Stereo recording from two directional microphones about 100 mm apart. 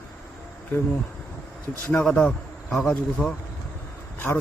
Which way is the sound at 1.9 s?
10° left (ahead or behind).